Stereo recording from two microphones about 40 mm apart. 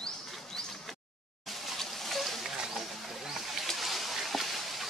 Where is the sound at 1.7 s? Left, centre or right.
Centre.